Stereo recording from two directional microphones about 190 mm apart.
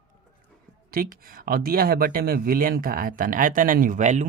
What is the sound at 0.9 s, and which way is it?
Speech, 50° right (ahead or behind).